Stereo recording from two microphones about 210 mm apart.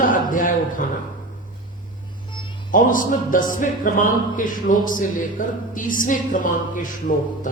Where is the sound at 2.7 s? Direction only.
40° left (ahead or behind).